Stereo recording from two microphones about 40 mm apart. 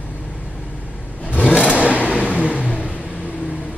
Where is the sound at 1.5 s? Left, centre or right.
Left.